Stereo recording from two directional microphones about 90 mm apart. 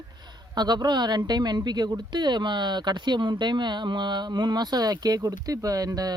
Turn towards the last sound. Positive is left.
turn(degrees=-45)  # may be behind; listen again after turning